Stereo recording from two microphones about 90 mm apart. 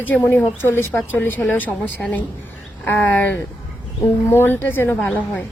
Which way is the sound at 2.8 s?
20° left (ahead or behind).